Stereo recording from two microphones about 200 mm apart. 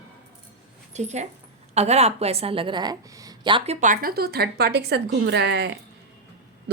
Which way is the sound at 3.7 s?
40° right (ahead or behind).